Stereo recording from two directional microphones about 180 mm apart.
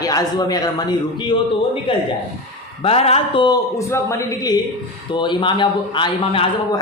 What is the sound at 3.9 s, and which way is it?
A man's voice, 15° left (ahead or behind).